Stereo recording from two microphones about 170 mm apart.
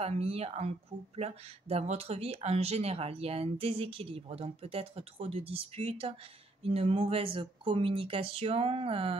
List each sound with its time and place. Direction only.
0.0 s speech: 35° right (ahead or behind)